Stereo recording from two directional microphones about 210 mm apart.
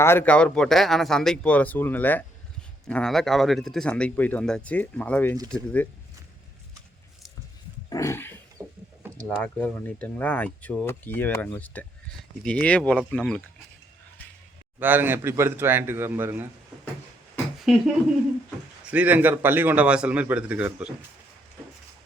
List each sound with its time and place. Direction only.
0.0 s speech: 10° left (ahead or behind)
7.9 s dog: 15° left (ahead or behind)
8.6 s a sound: 15° right (ahead or behind)
9.4 s speech: 5° left (ahead or behind)
14.8 s a man's voice: 10° right (ahead or behind)
17.7 s speech: centre (ahead or behind)
18.9 s a man's voice: 5° right (ahead or behind)